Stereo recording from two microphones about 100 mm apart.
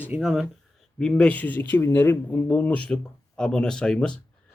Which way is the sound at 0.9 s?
10° left (ahead or behind).